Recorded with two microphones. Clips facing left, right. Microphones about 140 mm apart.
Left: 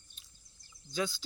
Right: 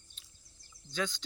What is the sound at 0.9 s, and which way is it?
Speech, 10° left (ahead or behind).